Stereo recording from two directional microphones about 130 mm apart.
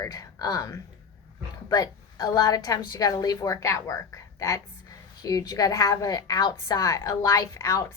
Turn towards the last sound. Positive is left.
turn(degrees=25)  # may be behind; listen again after turning